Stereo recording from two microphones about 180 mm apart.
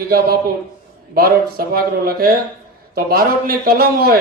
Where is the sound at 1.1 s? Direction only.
55° right (ahead or behind).